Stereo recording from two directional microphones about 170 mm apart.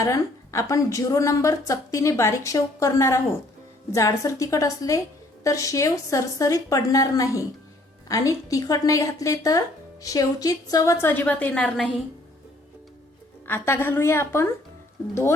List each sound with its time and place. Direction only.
0.0 s a woman's voice: 20° left (ahead or behind)
13.5 s a woman's voice: 15° left (ahead or behind)